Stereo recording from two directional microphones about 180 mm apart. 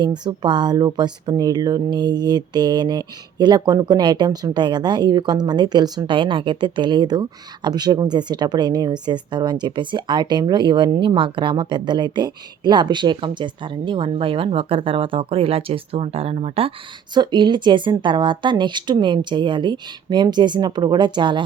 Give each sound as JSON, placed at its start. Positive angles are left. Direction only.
{"t": 0.0, "sound": "speech", "side_deg": -25}